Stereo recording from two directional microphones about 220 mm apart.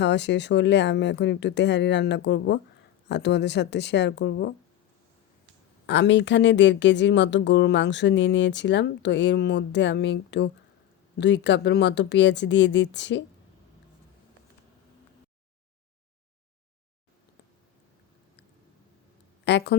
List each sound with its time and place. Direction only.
0.0 s speech: 50° left (ahead or behind)
5.8 s speech: 55° left (ahead or behind)
19.5 s speech: 50° left (ahead or behind)